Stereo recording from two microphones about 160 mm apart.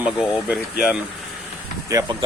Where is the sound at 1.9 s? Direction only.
25° right (ahead or behind).